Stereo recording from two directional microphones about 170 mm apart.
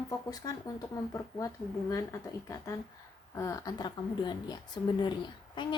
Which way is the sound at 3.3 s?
20° left (ahead or behind).